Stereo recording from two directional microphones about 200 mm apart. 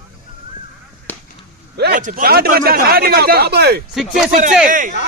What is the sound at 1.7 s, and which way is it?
A man's voice, 55° right (ahead or behind).